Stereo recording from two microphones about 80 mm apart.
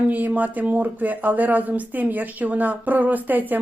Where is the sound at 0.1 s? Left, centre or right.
Right.